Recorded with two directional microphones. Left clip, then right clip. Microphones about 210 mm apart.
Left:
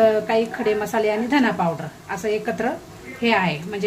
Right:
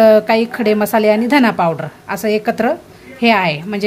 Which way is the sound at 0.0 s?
50° right (ahead or behind).